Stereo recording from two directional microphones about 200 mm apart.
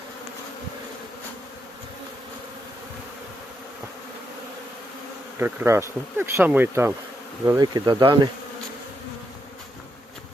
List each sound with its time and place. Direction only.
5.4 s speech: 10° right (ahead or behind)